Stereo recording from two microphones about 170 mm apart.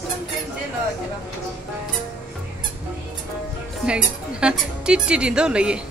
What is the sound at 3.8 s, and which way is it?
A woman's voice, 5° right (ahead or behind).